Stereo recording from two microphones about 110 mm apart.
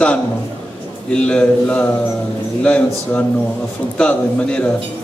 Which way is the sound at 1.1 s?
10° left (ahead or behind).